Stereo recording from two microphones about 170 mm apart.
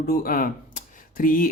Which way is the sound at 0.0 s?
60° left (ahead or behind).